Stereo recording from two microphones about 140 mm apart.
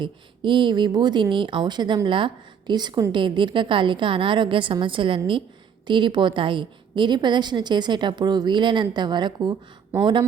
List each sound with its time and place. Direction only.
0.0 s speech: 35° right (ahead or behind)